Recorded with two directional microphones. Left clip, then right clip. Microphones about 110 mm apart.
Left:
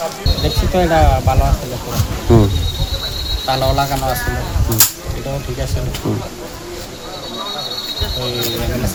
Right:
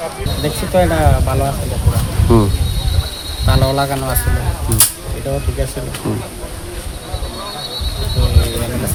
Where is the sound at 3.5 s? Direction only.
45° right (ahead or behind).